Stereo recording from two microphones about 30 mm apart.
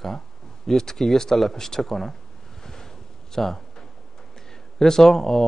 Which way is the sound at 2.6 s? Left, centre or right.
Centre.